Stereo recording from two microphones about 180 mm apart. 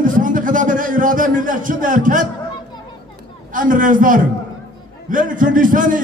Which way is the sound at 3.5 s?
50° right (ahead or behind).